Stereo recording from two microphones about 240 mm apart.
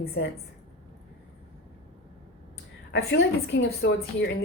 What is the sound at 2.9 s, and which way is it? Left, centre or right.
Speech, left.